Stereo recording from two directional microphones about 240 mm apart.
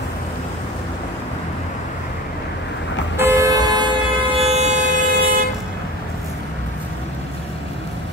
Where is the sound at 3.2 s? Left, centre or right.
Centre.